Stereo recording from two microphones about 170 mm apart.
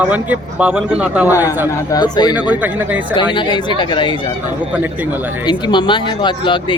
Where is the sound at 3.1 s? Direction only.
25° left (ahead or behind).